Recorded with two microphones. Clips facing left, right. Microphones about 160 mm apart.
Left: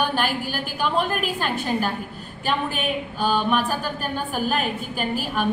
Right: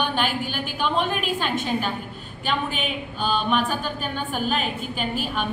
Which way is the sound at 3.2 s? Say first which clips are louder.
Left 1 dB; 10° left (ahead or behind).